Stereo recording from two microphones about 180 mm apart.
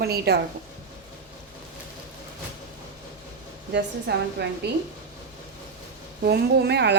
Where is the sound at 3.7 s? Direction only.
70° right (ahead or behind).